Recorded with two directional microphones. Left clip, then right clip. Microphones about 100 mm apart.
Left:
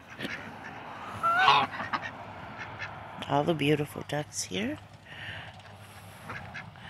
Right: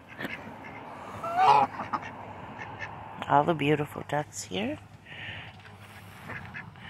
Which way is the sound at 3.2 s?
45° left (ahead or behind).